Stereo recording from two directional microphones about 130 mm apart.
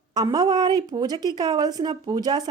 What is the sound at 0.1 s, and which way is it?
Speech, 30° right (ahead or behind).